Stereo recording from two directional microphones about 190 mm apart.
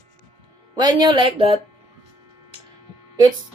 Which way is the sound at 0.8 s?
20° right (ahead or behind).